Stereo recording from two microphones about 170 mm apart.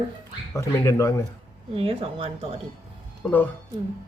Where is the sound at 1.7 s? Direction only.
35° right (ahead or behind).